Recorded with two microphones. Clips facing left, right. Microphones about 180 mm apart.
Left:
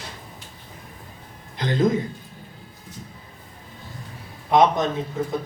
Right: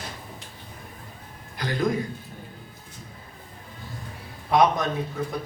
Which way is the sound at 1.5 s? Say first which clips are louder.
Left 5 dB; 20° left (ahead or behind).